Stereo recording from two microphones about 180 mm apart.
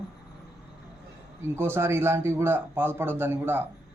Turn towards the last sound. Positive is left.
turn(degrees=-10)  # may be behind; listen again after turning